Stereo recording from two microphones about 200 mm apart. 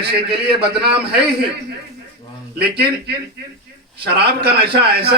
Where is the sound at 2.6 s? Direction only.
50° right (ahead or behind).